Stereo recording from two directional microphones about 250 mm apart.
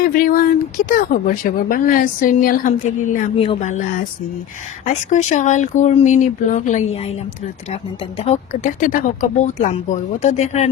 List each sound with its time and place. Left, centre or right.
0.0 s speech: left